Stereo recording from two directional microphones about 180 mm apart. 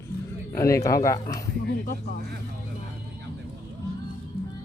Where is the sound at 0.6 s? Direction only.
15° left (ahead or behind).